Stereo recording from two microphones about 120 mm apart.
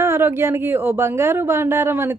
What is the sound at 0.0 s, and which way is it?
Speech, 20° right (ahead or behind).